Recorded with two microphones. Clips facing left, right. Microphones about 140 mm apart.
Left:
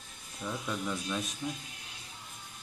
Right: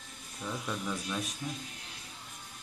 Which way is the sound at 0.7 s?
Centre (ahead or behind).